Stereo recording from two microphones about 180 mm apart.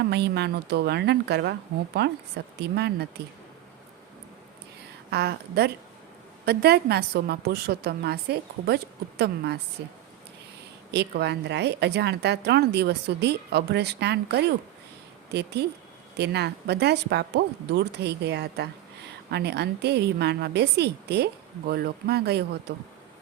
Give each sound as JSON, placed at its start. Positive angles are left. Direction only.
{"t": 0.0, "sound": "speech", "side_deg": -65}
{"t": 5.1, "sound": "a woman's voice", "side_deg": -65}